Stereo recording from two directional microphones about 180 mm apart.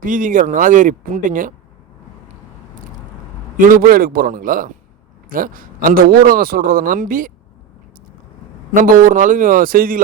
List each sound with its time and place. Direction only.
0.0 s a man's voice: 50° right (ahead or behind)
3.6 s a man's voice: 50° right (ahead or behind)
8.7 s a man's voice: 50° right (ahead or behind)